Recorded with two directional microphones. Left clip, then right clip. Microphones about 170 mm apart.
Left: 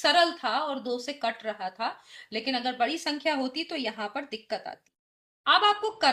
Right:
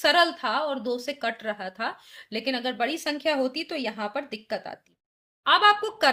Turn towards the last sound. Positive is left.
turn(degrees=-50)  # may be behind; listen again after turning